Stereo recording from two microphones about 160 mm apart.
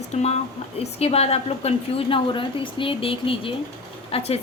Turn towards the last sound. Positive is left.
turn(degrees=40)  # may be behind; listen again after turning